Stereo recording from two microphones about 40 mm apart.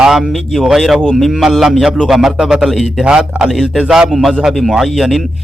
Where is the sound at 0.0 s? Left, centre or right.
Centre.